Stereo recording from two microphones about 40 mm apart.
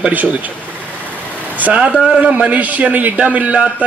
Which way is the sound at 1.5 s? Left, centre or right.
Right.